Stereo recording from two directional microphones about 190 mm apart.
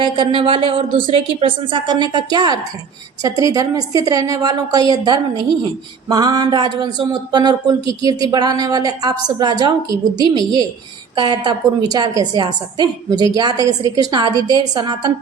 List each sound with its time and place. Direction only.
0.0 s a woman's voice: 25° right (ahead or behind)